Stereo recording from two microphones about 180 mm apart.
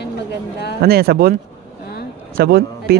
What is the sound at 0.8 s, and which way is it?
Speech, 60° right (ahead or behind).